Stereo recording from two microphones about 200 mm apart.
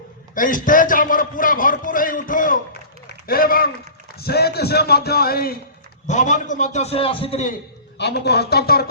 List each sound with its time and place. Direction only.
0.3 s a man's voice: 40° left (ahead or behind)
6.1 s a man's voice: 35° left (ahead or behind)
7.9 s a man's voice: 55° left (ahead or behind)